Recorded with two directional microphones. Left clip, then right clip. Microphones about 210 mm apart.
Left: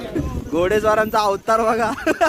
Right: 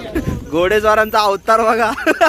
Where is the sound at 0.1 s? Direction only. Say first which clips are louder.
Right 5 dB; centre (ahead or behind).